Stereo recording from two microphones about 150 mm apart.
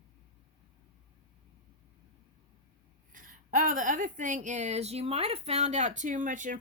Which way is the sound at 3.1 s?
65° right (ahead or behind).